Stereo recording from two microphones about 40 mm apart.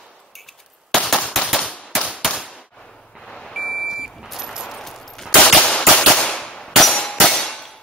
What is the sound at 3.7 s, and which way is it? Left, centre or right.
Vehicle, centre.